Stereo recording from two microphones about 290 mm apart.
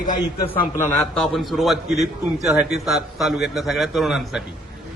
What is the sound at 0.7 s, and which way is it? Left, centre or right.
A man's voice, centre.